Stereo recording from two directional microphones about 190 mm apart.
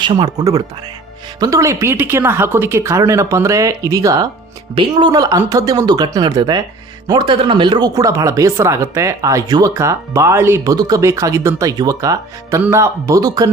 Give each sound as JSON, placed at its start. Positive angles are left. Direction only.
{"t": 0.0, "sound": "speech", "side_deg": -25}